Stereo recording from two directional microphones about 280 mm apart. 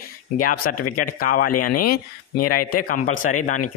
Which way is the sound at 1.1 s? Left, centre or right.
Left.